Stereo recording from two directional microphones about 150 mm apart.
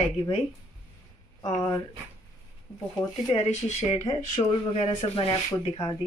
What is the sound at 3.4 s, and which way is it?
Speech, 50° left (ahead or behind).